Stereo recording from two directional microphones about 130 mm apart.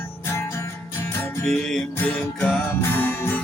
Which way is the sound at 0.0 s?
20° left (ahead or behind).